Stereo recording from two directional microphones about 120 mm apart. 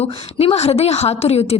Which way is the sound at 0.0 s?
60° left (ahead or behind).